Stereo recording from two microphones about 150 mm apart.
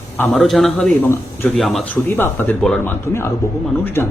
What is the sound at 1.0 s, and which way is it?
Speech, 15° left (ahead or behind).